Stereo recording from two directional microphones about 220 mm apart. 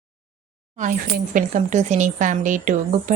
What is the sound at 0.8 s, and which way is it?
A woman's voice, 35° right (ahead or behind).